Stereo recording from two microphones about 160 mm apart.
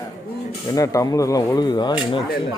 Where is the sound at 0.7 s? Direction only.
20° left (ahead or behind).